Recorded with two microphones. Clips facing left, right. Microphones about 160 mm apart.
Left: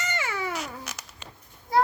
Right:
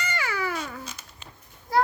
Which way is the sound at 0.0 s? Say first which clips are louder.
Right 1 dB; 25° left (ahead or behind).